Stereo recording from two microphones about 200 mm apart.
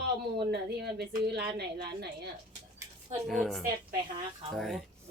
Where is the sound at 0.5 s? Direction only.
55° right (ahead or behind).